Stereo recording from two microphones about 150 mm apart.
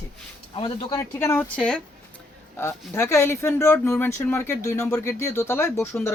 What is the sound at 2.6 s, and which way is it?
Speech, 20° left (ahead or behind).